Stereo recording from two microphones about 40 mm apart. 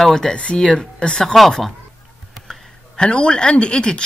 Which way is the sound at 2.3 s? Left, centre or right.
Centre.